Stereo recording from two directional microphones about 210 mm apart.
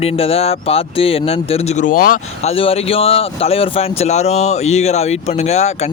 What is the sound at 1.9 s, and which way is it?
Speech, 40° left (ahead or behind).